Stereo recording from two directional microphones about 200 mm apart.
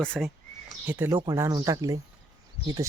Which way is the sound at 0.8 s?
10° right (ahead or behind).